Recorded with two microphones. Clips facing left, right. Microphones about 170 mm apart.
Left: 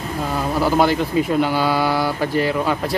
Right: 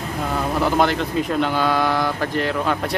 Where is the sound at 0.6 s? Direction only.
5° left (ahead or behind).